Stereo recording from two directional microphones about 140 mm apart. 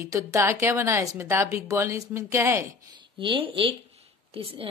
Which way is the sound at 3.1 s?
35° right (ahead or behind).